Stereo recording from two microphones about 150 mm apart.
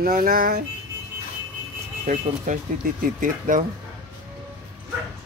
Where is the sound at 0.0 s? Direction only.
75° right (ahead or behind).